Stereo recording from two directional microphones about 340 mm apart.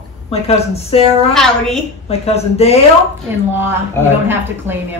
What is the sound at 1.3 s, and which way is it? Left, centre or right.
Speech, centre.